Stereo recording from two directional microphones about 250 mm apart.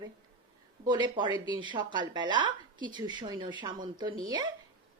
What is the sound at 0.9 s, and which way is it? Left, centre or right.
Speech, centre.